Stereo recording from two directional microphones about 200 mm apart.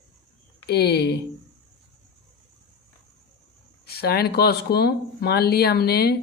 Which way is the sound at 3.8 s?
50° left (ahead or behind).